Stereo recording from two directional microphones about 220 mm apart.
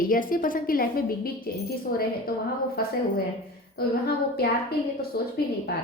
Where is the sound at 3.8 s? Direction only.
45° left (ahead or behind).